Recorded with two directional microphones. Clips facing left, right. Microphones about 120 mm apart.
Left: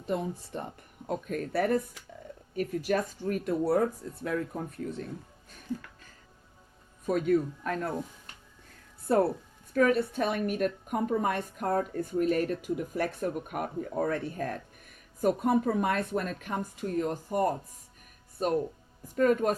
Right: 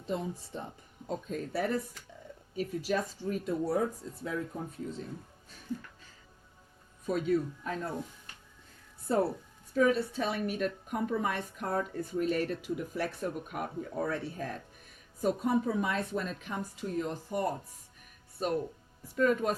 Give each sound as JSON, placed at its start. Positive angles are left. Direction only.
{"t": 0.0, "sound": "speech", "side_deg": 55}
{"t": 7.0, "sound": "speech", "side_deg": 50}
{"t": 9.1, "sound": "a woman's voice", "side_deg": 60}